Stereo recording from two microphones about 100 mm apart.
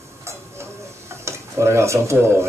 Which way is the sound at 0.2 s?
25° right (ahead or behind).